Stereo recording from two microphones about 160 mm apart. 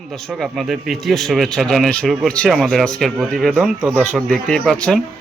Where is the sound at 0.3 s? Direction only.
Centre (ahead or behind).